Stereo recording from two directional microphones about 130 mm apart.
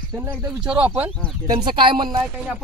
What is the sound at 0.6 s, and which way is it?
Speech, 5° right (ahead or behind).